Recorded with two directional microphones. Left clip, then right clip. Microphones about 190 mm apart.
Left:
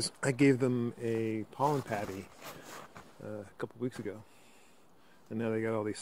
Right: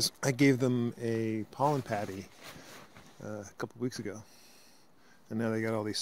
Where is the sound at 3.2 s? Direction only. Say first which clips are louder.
Right 1 dB; 30° right (ahead or behind).